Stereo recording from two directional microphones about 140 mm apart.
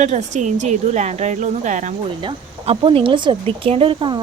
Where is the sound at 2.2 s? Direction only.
40° right (ahead or behind).